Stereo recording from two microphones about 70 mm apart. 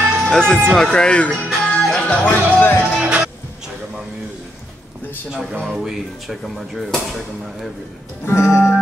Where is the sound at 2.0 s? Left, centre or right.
Left.